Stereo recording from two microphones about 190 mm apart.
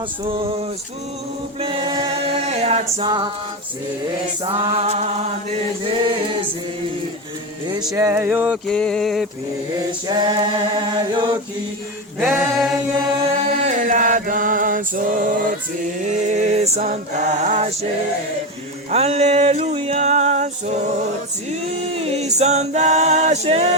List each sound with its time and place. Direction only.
0.3 s a capella: 30° right (ahead or behind)
1.6 s a capella: 25° right (ahead or behind)
4.4 s a capella: 30° right (ahead or behind)
7.9 s a sound: 15° right (ahead or behind)
8.6 s mantra: 5° left (ahead or behind)
10.1 s a capella: 25° right (ahead or behind)
12.3 s mantra: centre (ahead or behind)
13.6 s chant: 40° right (ahead or behind)
16.0 s a capella: 40° right (ahead or behind)
18.9 s a sound: 35° right (ahead or behind)
22.0 s a capella: 35° right (ahead or behind)